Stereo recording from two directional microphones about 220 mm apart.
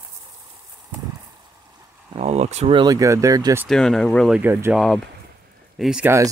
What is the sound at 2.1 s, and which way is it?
Speech, 30° right (ahead or behind).